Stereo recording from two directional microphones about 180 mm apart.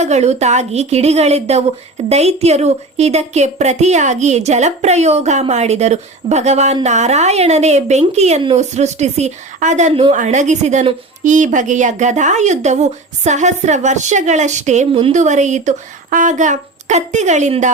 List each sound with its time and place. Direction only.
0.0 s a woman's voice: 40° right (ahead or behind)